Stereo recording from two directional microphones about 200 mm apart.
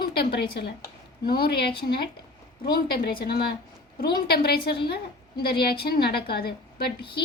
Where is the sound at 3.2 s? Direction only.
50° left (ahead or behind).